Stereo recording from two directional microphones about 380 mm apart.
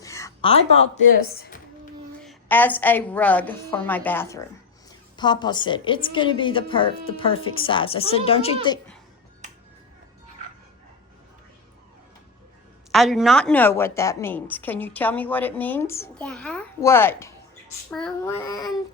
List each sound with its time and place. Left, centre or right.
0.0 s a sound: centre
1.2 s speech: left
2.2 s a woman's voice: centre
12.9 s a woman's voice: centre